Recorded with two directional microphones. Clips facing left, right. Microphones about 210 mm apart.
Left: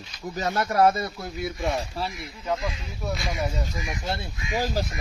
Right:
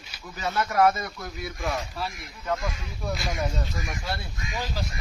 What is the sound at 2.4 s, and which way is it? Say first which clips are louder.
Speech: left 1 dB; 15° left (ahead or behind).